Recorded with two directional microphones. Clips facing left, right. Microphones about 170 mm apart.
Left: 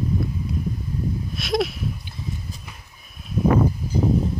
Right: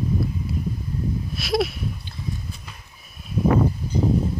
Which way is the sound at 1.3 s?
Centre (ahead or behind).